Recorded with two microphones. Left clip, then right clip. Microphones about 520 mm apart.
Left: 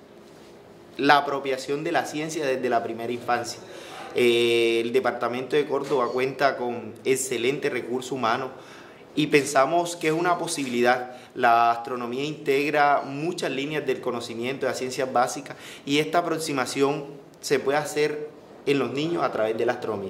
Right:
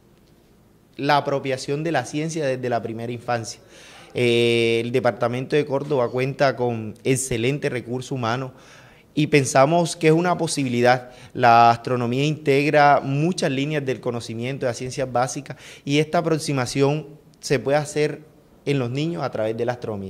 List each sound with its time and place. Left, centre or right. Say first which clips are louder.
0.9 s speech: even; right